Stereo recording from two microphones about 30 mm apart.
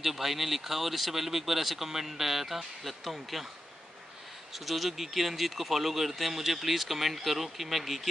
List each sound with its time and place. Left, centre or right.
0.0 s speech: centre
4.6 s speech: centre